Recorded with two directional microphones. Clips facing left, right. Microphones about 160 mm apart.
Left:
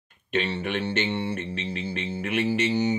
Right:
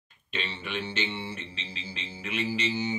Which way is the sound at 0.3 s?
60° left (ahead or behind).